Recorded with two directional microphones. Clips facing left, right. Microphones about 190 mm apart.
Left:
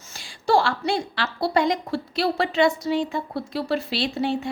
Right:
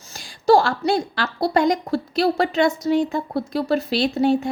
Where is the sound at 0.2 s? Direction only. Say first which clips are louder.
Right 5 dB; 40° right (ahead or behind).